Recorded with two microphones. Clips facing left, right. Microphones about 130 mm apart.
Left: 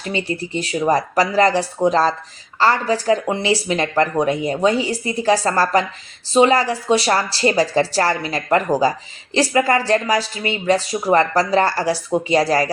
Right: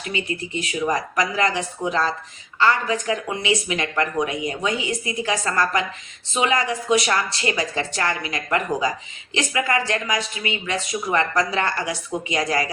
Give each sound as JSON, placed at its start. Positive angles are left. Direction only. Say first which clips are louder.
{"t": 0.0, "sound": "a woman's voice", "louder": "left 4 dB", "side_deg": 35}